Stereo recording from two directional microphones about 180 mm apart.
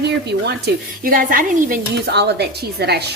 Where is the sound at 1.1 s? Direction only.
50° right (ahead or behind).